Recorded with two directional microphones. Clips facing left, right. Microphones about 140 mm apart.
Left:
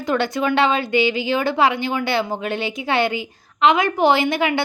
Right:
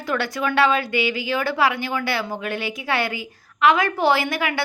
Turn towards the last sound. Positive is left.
turn(degrees=25)  # may be behind; listen again after turning